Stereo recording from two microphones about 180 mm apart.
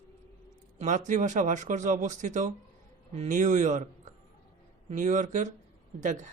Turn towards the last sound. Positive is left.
turn(degrees=-45)  # may be behind; listen again after turning